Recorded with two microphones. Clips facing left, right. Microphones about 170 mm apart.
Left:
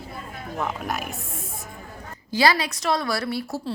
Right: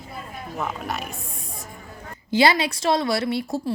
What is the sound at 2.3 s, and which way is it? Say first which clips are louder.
Speech: right 2 dB; 25° right (ahead or behind).